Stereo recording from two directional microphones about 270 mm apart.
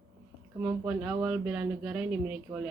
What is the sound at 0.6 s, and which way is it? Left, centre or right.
A woman's voice, centre.